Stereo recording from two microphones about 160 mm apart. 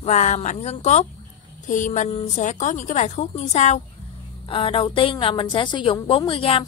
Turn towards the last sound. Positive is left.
turn(degrees=35)  # may be behind; listen again after turning